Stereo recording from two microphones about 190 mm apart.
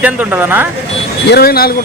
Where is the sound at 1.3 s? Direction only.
55° left (ahead or behind).